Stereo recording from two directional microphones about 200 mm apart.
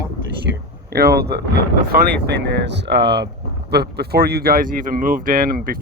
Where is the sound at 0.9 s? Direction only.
50° right (ahead or behind).